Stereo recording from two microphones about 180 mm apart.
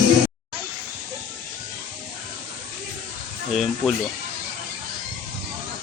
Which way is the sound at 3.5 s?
Centre (ahead or behind).